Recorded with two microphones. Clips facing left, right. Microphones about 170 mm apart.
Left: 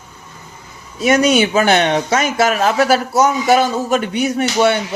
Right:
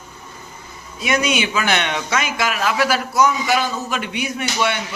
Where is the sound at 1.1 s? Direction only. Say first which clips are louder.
Left 7 dB; 40° left (ahead or behind).